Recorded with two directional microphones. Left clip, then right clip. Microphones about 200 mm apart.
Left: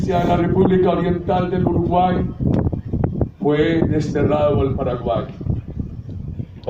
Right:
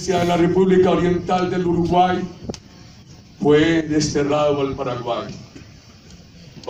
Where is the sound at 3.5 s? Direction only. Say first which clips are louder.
Right 2 dB; 55° left (ahead or behind).